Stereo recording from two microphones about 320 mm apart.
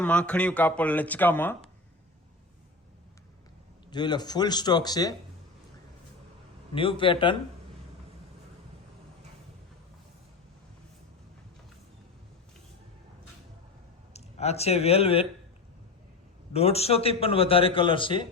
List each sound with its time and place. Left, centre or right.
0.0 s speech: centre
3.8 s a man's voice: centre
6.7 s a man's voice: centre
14.1 s speech: centre
16.5 s a man's voice: centre